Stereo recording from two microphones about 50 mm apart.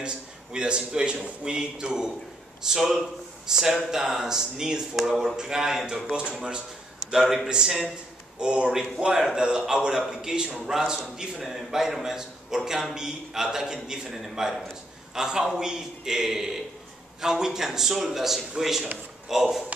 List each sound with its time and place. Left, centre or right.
0.0 s a man's voice: centre
7.1 s a man's voice: centre